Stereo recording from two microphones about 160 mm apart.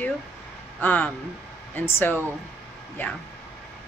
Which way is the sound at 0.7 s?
10° left (ahead or behind).